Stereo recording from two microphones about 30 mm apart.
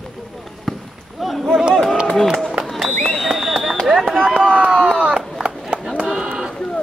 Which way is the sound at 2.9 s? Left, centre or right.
Centre.